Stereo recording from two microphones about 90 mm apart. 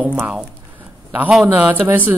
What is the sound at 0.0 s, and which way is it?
Speech, 15° right (ahead or behind).